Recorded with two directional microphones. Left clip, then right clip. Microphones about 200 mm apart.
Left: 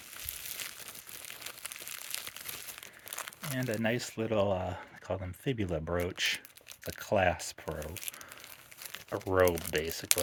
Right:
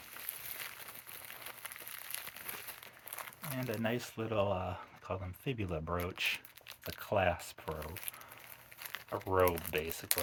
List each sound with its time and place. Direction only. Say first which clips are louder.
1.3 s crumpling: left 4 dB; 35° left (ahead or behind)
3.1 s speech: left 5 dB; 35° left (ahead or behind)
8.8 s speech: left 2 dB; 30° left (ahead or behind)